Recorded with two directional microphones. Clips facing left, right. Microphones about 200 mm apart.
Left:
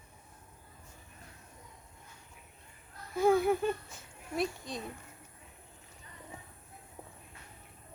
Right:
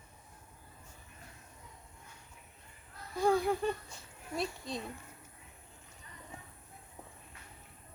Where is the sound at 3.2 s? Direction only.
5° left (ahead or behind).